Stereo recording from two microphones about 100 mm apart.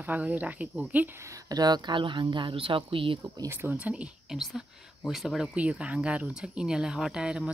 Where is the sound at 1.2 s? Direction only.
35° right (ahead or behind); by 3.2 s 60° right (ahead or behind).